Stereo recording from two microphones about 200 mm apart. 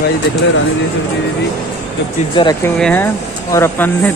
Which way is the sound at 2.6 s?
5° left (ahead or behind).